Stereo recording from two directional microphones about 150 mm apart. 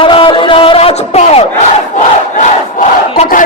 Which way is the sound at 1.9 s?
55° left (ahead or behind).